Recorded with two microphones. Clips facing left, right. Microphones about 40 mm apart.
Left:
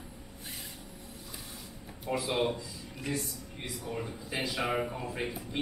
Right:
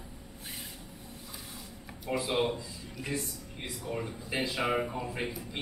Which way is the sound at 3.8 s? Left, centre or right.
Centre.